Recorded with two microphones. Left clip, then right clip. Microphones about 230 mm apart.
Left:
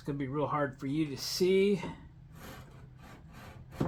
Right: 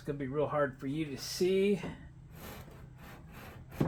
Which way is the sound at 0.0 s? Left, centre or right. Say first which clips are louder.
Even; left.